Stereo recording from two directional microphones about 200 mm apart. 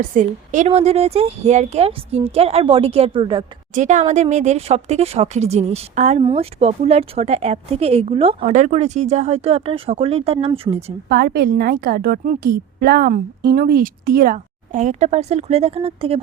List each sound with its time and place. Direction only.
0.0 s a woman's voice: 40° right (ahead or behind)
3.8 s a woman's voice: 35° right (ahead or behind)
11.1 s a woman's voice: 50° right (ahead or behind); by 16.2 s 30° right (ahead or behind)